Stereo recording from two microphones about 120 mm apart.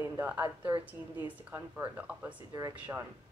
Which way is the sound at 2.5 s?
30° right (ahead or behind).